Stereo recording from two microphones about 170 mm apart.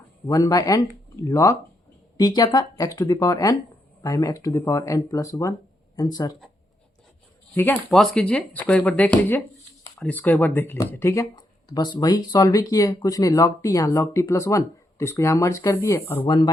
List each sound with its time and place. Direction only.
0.3 s speech: 20° left (ahead or behind)
7.5 s speech: 15° left (ahead or behind)
7.9 s speech: centre (ahead or behind)
16.2 s speech: 25° left (ahead or behind)